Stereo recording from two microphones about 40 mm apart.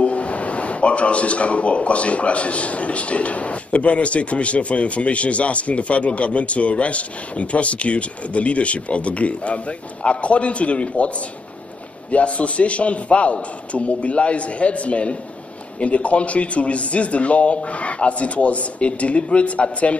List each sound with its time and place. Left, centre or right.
0.0 s speech: left
12.1 s speech: left